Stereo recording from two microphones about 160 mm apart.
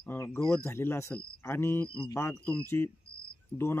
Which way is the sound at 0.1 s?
15° left (ahead or behind).